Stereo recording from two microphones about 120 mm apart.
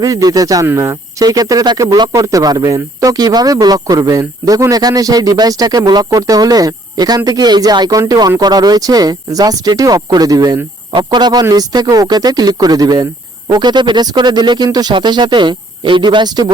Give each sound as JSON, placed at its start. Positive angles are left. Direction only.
{"t": 0.0, "sound": "speech", "side_deg": -30}